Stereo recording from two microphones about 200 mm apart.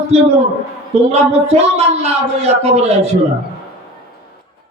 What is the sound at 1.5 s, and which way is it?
A man's voice, 30° right (ahead or behind).